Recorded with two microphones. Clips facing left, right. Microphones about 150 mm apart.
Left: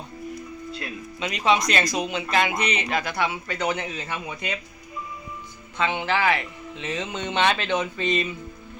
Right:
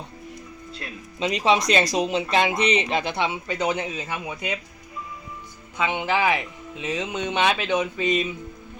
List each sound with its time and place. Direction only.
0.7 s speech: 30° right (ahead or behind); by 4.6 s 15° right (ahead or behind)
5.7 s speech: 15° right (ahead or behind)